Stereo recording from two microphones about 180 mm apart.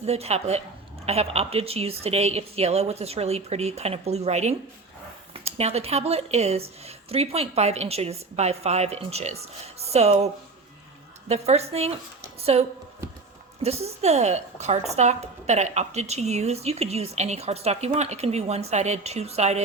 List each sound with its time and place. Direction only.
0.0 s a woman's voice: 35° right (ahead or behind)
11.3 s a woman's voice: 35° right (ahead or behind)